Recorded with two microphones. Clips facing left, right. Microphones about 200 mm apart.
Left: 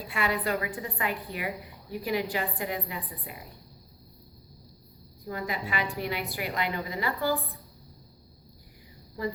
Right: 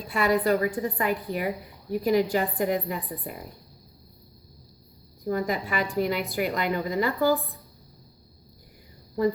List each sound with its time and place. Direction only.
0.1 s a woman's voice: 40° right (ahead or behind)
5.2 s a woman's voice: 45° right (ahead or behind)